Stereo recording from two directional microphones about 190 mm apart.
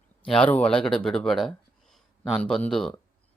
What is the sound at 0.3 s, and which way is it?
Speech, 5° left (ahead or behind).